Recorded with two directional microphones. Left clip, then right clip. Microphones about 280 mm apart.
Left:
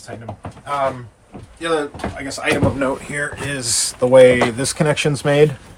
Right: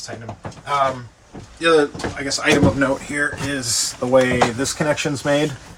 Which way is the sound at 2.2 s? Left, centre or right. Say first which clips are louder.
Right 2 dB; left.